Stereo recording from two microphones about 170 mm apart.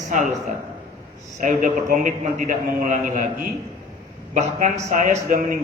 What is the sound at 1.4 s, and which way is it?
A man's voice, 50° right (ahead or behind).